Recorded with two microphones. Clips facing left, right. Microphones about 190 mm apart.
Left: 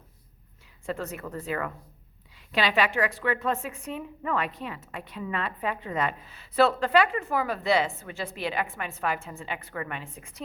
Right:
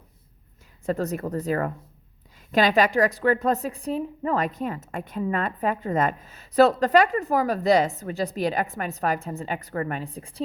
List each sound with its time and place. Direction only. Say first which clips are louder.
0.9 s a woman's voice: right 7 dB; 40° right (ahead or behind)